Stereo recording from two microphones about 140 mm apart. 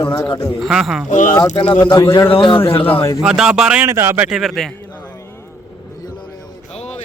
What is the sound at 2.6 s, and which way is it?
Speech, 15° left (ahead or behind).